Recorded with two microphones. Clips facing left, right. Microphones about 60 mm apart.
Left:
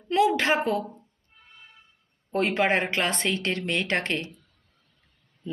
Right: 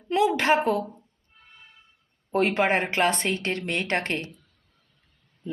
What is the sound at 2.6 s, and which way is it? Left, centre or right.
Speech, right.